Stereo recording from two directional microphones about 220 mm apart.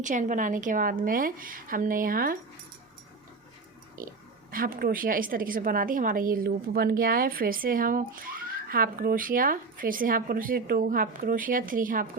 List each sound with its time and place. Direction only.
0.0 s a woman's voice: 35° right (ahead or behind)
4.0 s a woman's voice: 40° right (ahead or behind)